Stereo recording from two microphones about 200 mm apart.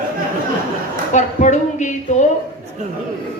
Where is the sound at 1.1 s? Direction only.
35° left (ahead or behind).